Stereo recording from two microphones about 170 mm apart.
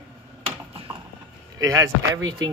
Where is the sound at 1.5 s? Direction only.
20° right (ahead or behind).